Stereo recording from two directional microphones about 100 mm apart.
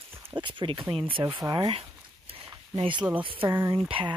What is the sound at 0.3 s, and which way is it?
Speech, 55° right (ahead or behind).